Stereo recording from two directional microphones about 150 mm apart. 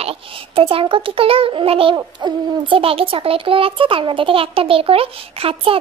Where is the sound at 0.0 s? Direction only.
40° right (ahead or behind).